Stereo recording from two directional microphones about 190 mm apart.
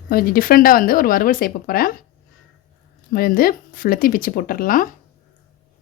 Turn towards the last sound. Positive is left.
turn(degrees=45)  # may be behind; listen again after turning